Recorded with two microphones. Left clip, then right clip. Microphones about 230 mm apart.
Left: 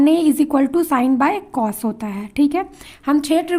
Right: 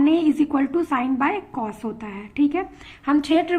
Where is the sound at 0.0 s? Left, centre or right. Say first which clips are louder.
Left 4 dB; left.